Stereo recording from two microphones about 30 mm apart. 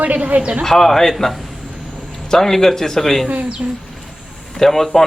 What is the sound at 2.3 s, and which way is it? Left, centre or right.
Speech, centre.